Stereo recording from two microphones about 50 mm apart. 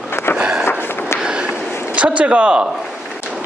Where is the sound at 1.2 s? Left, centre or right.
Centre.